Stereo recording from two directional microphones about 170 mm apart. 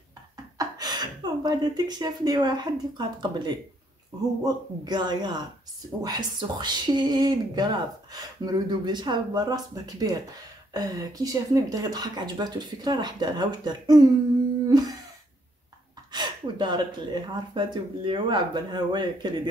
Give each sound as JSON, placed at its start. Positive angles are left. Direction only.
{"t": 0.6, "sound": "speech", "side_deg": -25}
{"t": 14.7, "sound": "humming", "side_deg": -20}
{"t": 16.1, "sound": "speech", "side_deg": -25}